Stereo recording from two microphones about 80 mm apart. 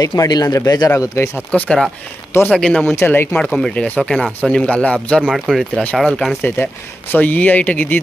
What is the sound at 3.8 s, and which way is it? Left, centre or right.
Speech, centre.